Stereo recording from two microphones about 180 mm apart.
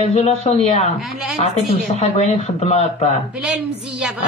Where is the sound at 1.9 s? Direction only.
35° left (ahead or behind).